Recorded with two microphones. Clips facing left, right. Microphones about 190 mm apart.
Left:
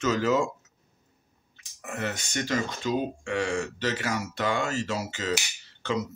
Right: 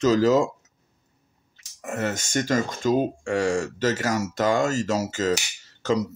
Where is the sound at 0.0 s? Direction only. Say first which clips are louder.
Right 6 dB; 35° right (ahead or behind).